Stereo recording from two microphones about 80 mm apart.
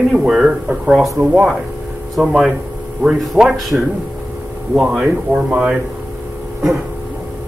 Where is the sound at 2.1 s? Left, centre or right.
Centre.